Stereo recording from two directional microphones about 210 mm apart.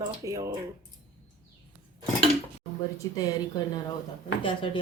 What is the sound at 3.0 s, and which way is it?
Speech, 20° left (ahead or behind).